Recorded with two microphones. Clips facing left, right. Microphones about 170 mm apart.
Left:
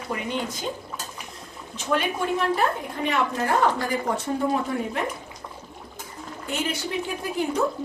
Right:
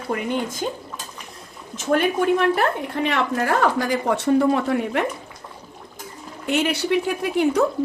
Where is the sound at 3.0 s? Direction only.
90° right.